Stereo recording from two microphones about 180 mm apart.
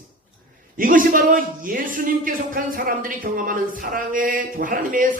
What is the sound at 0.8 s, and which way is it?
A man's voice, 50° right (ahead or behind).